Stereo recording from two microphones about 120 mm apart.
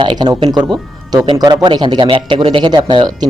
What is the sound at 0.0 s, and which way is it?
Speech, 40° right (ahead or behind).